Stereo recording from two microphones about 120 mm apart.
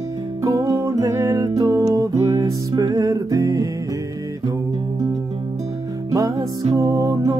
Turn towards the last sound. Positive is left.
turn(degrees=-30)  # may be behind; listen again after turning